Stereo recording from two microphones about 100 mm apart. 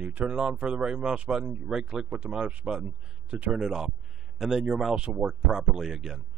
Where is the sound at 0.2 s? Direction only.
5° right (ahead or behind).